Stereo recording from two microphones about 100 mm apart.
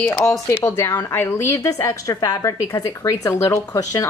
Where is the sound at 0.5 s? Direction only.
30° left (ahead or behind).